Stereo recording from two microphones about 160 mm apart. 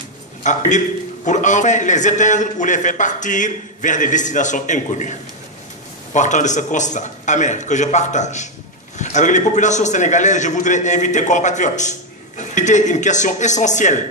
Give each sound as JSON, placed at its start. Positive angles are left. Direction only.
{"t": 0.7, "sound": "a man's voice", "side_deg": 50}
{"t": 6.1, "sound": "a man's voice", "side_deg": 50}